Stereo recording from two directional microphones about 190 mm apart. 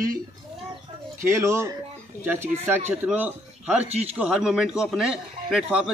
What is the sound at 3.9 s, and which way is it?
Speech, 35° right (ahead or behind).